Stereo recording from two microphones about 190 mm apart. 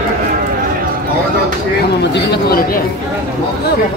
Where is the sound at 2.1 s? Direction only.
60° left (ahead or behind).